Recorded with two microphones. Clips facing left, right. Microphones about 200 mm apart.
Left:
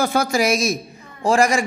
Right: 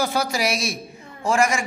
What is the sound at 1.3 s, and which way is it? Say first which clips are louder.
Speech: left 4 dB; 35° left (ahead or behind).